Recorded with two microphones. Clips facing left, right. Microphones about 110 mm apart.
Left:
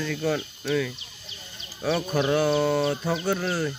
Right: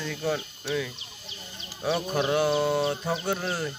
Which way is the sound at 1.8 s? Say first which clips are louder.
Left 2 dB; 25° right (ahead or behind).